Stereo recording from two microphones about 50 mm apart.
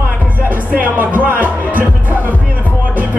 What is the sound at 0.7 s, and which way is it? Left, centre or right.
Music, right.